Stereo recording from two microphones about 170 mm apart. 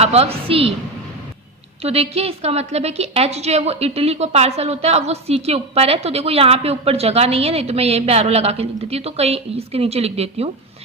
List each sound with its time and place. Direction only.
0.0 s a woman's voice: 35° right (ahead or behind)
1.8 s a woman's voice: 35° right (ahead or behind)